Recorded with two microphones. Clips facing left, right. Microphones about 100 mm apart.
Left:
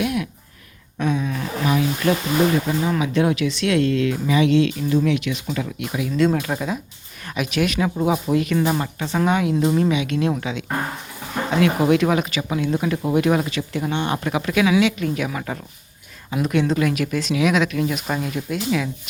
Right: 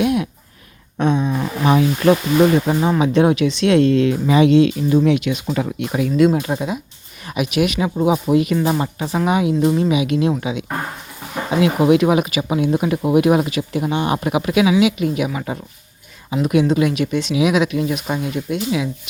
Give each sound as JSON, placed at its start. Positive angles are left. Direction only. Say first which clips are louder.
{"t": 0.0, "sound": "a sound", "louder": "right 5 dB", "side_deg": -25}
{"t": 2.9, "sound": "speech", "louder": "right 6 dB", "side_deg": -20}
{"t": 5.5, "sound": "speech", "louder": "right 5 dB", "side_deg": -40}
{"t": 6.1, "sound": "speech", "louder": "right 4 dB", "side_deg": -15}